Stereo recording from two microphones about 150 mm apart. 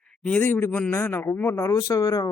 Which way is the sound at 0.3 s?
10° left (ahead or behind).